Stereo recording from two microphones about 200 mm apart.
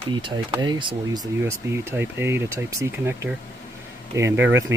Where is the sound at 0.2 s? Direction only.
25° right (ahead or behind).